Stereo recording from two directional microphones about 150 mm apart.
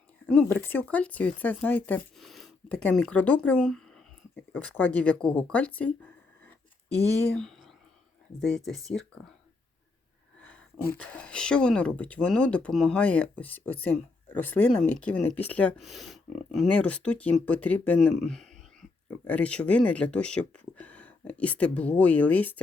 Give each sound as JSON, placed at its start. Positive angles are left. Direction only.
{"t": 0.3, "sound": "speech", "side_deg": 10}
{"t": 7.3, "sound": "whispering", "side_deg": 0}
{"t": 8.6, "sound": "speech", "side_deg": 5}
{"t": 10.4, "sound": "speech", "side_deg": 10}